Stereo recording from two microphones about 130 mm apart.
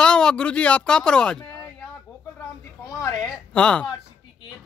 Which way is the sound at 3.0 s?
25° left (ahead or behind).